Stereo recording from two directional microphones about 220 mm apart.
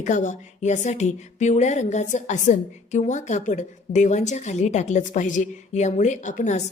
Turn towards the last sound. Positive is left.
turn(degrees=35)  # may be behind; listen again after turning